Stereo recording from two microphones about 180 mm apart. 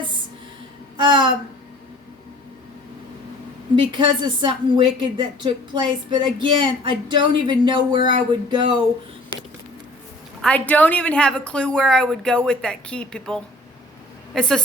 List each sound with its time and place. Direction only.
0.9 s speech: 25° right (ahead or behind)
3.8 s speech: 25° right (ahead or behind)
10.4 s speech: 10° left (ahead or behind)